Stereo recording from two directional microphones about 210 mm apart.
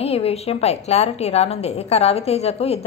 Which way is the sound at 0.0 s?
30° left (ahead or behind).